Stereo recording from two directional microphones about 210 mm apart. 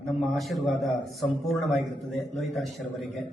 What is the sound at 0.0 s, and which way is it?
A man's voice, centre (ahead or behind).